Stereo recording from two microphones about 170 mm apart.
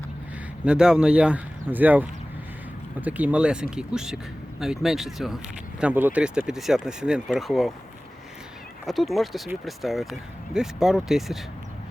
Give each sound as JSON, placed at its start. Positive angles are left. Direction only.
{"t": 0.6, "sound": "speech", "side_deg": -5}
{"t": 8.9, "sound": "speech", "side_deg": 0}